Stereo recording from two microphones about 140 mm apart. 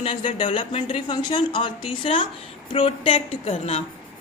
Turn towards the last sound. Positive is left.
turn(degrees=45)  # may be behind; listen again after turning